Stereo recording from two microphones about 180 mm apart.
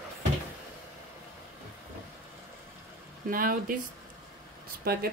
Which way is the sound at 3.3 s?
50° right (ahead or behind).